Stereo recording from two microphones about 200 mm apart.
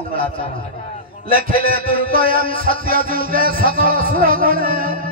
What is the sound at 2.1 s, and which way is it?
Music, 45° right (ahead or behind).